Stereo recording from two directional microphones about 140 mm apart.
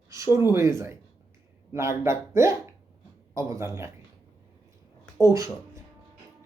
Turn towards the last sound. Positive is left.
turn(degrees=-20)  # may be behind; listen again after turning